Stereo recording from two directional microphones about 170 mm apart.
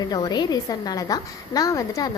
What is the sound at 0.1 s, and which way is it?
A woman's voice, 25° left (ahead or behind).